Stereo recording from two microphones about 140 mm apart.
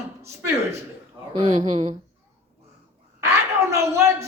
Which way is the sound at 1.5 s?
55° right (ahead or behind).